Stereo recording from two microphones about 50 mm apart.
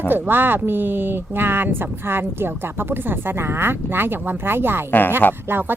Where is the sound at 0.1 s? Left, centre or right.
Right.